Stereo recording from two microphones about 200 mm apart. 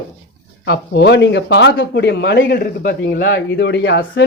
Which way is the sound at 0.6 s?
55° left (ahead or behind).